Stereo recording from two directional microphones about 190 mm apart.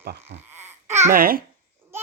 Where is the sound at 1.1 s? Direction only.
50° right (ahead or behind).